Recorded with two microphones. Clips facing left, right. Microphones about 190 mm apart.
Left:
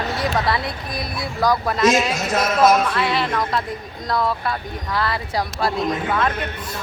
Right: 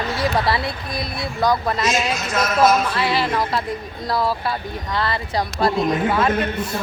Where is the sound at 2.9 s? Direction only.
5° right (ahead or behind).